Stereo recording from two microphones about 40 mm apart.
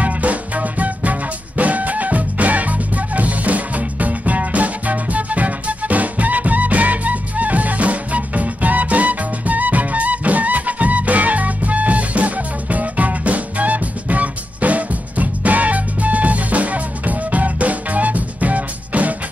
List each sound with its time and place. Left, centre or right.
0.0 s music: right